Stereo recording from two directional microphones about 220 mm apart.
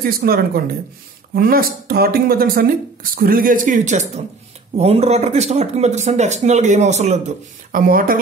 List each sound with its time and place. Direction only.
0.0 s speech: 40° right (ahead or behind)